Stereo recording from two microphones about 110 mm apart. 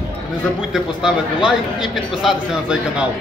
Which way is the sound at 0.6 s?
5° right (ahead or behind).